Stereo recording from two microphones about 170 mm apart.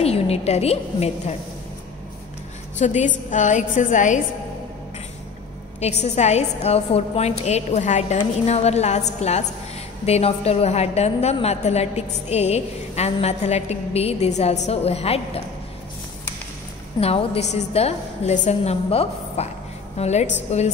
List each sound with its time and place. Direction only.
0.0 s a woman's voice: 35° left (ahead or behind)
2.8 s a woman's voice: 45° left (ahead or behind)
5.8 s a woman's voice: 40° left (ahead or behind)
17.0 s a woman's voice: 35° left (ahead or behind)